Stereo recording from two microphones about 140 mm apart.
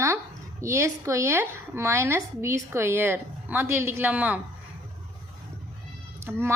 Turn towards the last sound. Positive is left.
turn(degrees=-20)  # may be behind; listen again after turning